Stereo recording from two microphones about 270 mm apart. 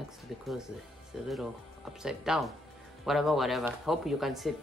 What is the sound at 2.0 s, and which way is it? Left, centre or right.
Speech, centre.